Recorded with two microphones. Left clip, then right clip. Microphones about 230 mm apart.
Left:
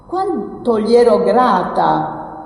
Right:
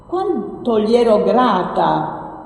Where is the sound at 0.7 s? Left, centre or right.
Left.